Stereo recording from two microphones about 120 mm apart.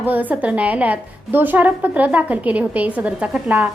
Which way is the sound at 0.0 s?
15° right (ahead or behind).